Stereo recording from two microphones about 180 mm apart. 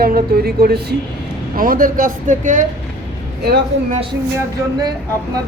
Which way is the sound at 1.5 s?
50° right (ahead or behind).